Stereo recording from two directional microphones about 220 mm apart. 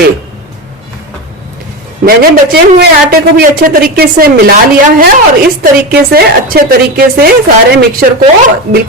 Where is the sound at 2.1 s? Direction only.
45° right (ahead or behind).